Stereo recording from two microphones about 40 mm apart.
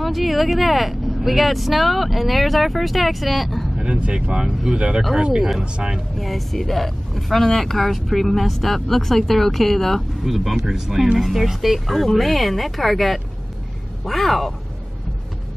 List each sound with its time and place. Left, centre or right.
0.0 s speech: centre
3.7 s speech: right
5.4 s speech: centre
6.1 s speech: centre